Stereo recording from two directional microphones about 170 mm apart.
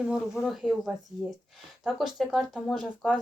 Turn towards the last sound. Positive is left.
turn(degrees=5)  # may be behind; listen again after turning